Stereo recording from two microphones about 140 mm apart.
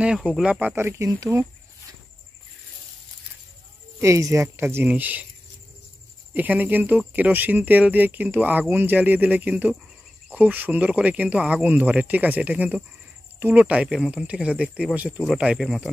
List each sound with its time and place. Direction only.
0.0 s speech: 5° right (ahead or behind); by 1.4 s 20° right (ahead or behind)
4.0 s speech: 20° right (ahead or behind)
6.3 s speech: 10° right (ahead or behind)